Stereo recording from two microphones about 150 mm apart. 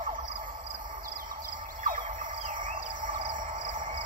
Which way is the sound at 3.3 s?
55° right (ahead or behind).